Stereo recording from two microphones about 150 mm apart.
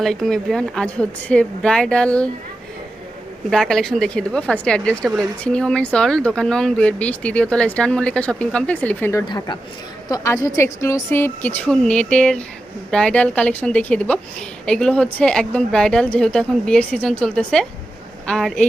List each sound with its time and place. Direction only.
0.0 s speech: centre (ahead or behind)
3.5 s a woman's voice: 5° left (ahead or behind)